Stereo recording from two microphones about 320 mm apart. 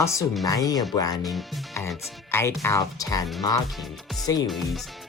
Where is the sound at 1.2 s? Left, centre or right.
Centre.